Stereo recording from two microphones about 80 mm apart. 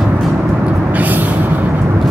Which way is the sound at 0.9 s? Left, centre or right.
Right.